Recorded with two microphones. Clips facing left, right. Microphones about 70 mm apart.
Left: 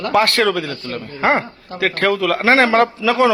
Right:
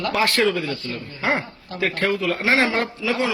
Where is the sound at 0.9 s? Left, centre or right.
Left.